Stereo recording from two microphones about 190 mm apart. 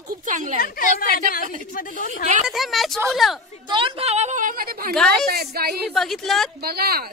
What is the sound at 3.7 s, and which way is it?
A woman's voice, 30° right (ahead or behind).